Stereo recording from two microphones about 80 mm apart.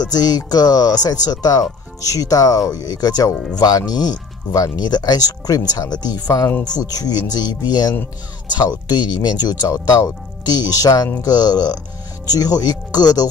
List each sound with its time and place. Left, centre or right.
0.0 s speech: left